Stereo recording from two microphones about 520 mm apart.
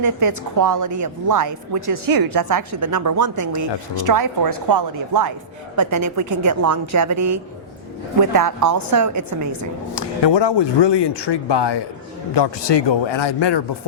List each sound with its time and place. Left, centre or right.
0.0 s a woman's voice: right
9.9 s speech: left